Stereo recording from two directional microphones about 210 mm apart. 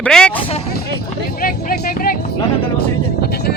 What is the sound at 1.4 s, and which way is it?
Music, 45° left (ahead or behind).